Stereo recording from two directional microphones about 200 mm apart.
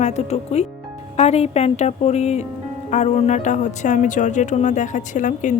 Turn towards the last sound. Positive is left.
turn(degrees=40)  # may be behind; listen again after turning